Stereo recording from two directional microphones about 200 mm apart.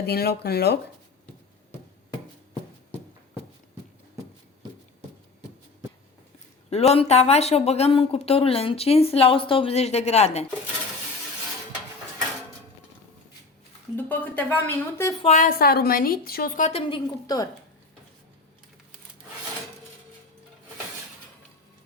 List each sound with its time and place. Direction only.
0.0 s a woman's voice: 50° left (ahead or behind)
6.7 s speech: 30° left (ahead or behind)
13.9 s speech: 10° left (ahead or behind)
15.2 s a woman's voice: 35° left (ahead or behind)
17.2 s speech: 20° left (ahead or behind)